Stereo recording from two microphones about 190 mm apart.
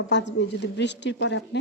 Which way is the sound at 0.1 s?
70° left (ahead or behind).